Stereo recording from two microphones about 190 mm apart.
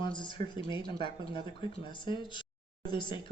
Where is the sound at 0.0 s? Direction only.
25° left (ahead or behind).